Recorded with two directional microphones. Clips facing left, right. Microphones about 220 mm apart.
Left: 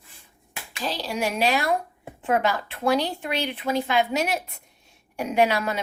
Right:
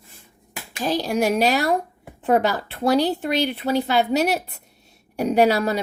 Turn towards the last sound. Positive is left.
turn(degrees=-35)  # may be behind; listen again after turning